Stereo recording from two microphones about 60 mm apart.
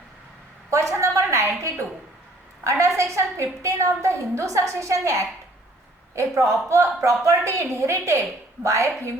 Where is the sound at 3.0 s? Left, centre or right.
Right.